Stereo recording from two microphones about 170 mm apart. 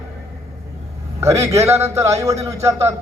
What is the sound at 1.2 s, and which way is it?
A man's voice, 15° right (ahead or behind).